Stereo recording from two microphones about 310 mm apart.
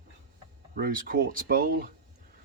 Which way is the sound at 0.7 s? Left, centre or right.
Right.